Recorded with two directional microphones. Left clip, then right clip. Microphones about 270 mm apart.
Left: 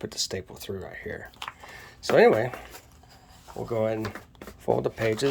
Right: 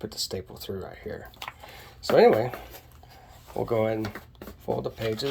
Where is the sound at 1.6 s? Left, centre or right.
Centre.